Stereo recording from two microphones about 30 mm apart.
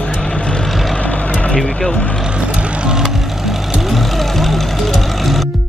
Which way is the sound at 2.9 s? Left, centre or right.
Centre.